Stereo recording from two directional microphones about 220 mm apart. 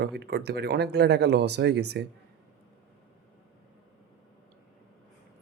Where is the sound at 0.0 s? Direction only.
50° right (ahead or behind).